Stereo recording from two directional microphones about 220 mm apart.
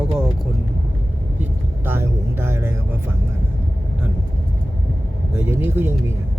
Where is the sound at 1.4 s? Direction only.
10° right (ahead or behind).